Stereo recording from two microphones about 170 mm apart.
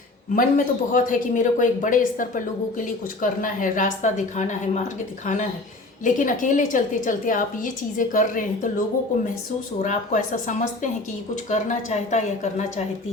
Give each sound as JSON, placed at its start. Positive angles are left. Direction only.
{"t": 0.3, "sound": "speech", "side_deg": 50}
{"t": 9.8, "sound": "speech", "side_deg": 45}